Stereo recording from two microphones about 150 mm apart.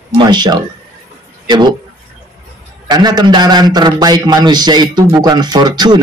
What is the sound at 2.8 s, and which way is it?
A man's voice, 25° right (ahead or behind).